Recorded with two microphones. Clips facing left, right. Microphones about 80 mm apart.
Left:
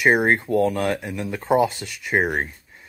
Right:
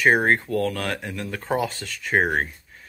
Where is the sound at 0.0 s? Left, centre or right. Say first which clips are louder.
Left 1 dB; centre.